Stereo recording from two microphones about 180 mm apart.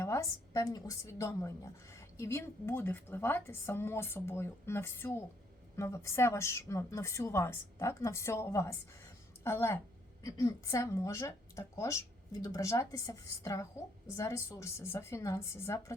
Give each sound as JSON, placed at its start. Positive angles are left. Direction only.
{"t": 0.0, "sound": "a woman's voice", "side_deg": 15}